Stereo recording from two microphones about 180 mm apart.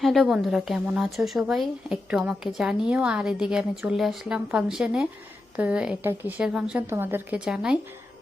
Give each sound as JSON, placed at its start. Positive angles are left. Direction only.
{"t": 0.0, "sound": "a woman's voice", "side_deg": 0}